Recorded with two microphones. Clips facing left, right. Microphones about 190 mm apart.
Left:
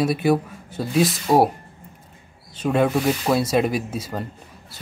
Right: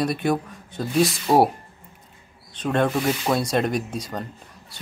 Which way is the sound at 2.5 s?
5° left (ahead or behind).